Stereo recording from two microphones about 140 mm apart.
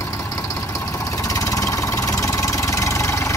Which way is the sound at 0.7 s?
25° left (ahead or behind).